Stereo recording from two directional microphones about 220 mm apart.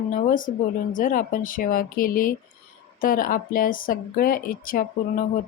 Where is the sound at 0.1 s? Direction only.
35° left (ahead or behind).